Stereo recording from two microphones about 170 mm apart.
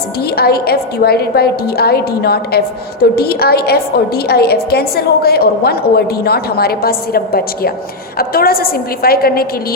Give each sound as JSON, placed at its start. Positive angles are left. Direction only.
{"t": 0.3, "sound": "a woman's voice", "side_deg": 65}